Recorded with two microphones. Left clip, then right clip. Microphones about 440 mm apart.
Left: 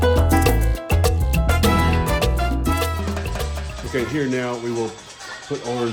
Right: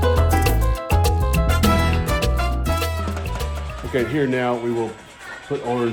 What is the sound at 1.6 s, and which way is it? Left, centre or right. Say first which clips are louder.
Music: left 2 dB; left.